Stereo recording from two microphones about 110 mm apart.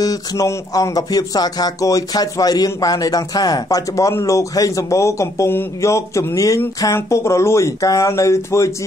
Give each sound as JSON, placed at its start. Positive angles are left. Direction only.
{"t": 0.0, "sound": "speech", "side_deg": 35}